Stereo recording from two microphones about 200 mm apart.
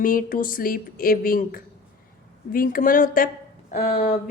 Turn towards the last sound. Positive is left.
turn(degrees=45)  # may be behind; listen again after turning